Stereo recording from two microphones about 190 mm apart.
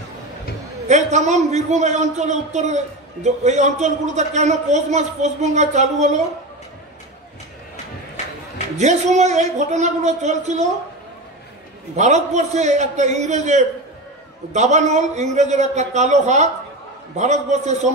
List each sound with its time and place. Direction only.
0.8 s a man's voice: 35° right (ahead or behind)
8.7 s a man's voice: 35° right (ahead or behind)
12.0 s a man's voice: 40° right (ahead or behind)